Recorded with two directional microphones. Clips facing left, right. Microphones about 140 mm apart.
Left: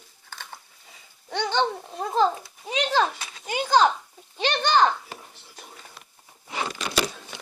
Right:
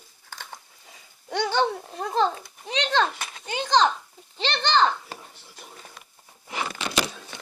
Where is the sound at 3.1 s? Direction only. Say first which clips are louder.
Right 3 dB; 50° right (ahead or behind).